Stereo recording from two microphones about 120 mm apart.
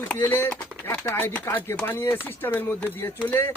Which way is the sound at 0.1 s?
15° left (ahead or behind).